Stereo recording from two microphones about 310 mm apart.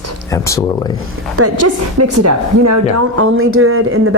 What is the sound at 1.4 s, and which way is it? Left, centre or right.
A woman's voice, right.